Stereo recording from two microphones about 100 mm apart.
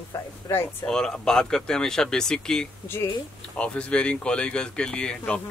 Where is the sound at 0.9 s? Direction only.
5° left (ahead or behind).